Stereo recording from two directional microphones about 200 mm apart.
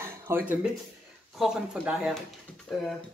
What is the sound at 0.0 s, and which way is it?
Music, 10° right (ahead or behind).